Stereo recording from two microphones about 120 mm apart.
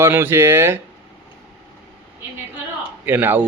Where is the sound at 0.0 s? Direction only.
20° right (ahead or behind).